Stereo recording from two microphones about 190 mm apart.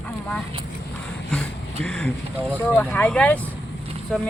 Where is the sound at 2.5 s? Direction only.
10° left (ahead or behind).